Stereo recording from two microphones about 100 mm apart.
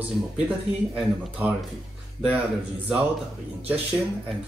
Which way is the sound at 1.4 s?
15° right (ahead or behind).